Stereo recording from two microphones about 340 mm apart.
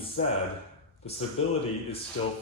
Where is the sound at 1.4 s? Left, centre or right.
Centre.